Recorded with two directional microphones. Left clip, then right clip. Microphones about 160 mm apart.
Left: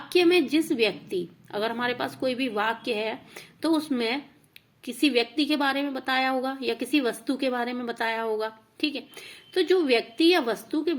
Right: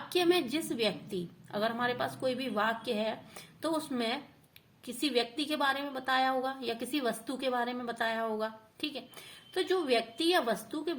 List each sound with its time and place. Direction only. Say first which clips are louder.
0.1 s a woman's voice: left 8 dB; 15° left (ahead or behind)